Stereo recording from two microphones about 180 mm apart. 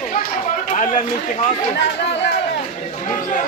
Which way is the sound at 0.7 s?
45° left (ahead or behind).